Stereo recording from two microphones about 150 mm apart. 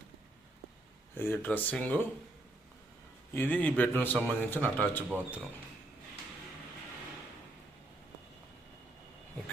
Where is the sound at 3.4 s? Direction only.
10° left (ahead or behind).